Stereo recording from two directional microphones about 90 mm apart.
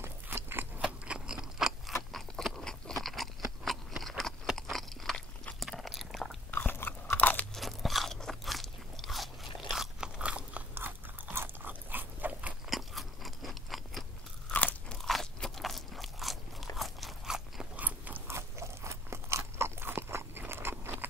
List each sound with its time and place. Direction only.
0.0 s biting: 25° right (ahead or behind)
0.7 s a sound: 10° right (ahead or behind)
2.1 s crunch: 5° left (ahead or behind)
3.6 s a sound: centre (ahead or behind)
5.6 s biting: centre (ahead or behind)
6.5 s crunch: 25° left (ahead or behind)
7.5 s crunch: centre (ahead or behind); by 12.5 s 15° right (ahead or behind)
12.6 s a sound: centre (ahead or behind)
14.5 s crunch: 15° left (ahead or behind)
15.0 s crunch: centre (ahead or behind)
17.7 s crunch: 15° right (ahead or behind)